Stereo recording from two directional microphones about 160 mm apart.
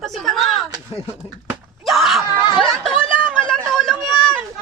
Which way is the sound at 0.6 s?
25° right (ahead or behind).